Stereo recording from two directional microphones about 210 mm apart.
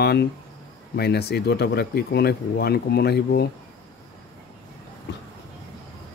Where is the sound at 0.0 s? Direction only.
50° left (ahead or behind).